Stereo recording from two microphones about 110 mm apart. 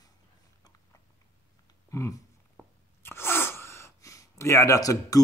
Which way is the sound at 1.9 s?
25° left (ahead or behind).